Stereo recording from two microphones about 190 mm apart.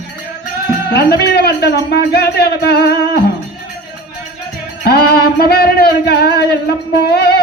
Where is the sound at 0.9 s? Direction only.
55° left (ahead or behind).